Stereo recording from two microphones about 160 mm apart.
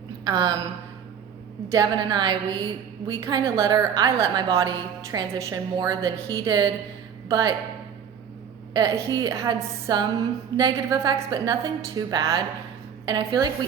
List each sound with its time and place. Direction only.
0.3 s a woman's voice: 25° right (ahead or behind)
1.7 s a woman's voice: 25° right (ahead or behind)
8.7 s a woman's voice: 25° right (ahead or behind)